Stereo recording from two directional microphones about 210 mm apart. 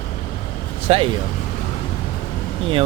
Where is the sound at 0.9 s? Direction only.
30° right (ahead or behind).